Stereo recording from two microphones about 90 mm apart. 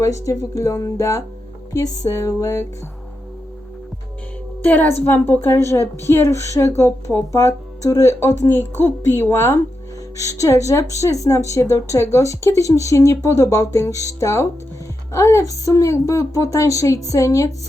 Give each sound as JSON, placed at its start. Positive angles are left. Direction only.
{"t": 0.0, "sound": "a woman's voice", "side_deg": 35}
{"t": 4.6, "sound": "a woman's voice", "side_deg": 20}